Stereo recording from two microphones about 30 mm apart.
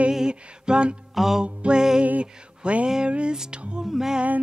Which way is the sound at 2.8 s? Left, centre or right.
Right.